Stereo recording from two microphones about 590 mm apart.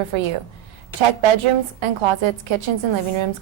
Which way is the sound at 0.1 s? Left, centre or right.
Right.